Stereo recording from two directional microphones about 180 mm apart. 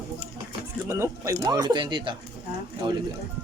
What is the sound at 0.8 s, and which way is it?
Speech, 15° right (ahead or behind).